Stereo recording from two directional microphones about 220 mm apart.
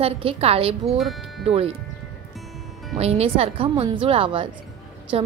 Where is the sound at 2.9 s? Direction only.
30° right (ahead or behind).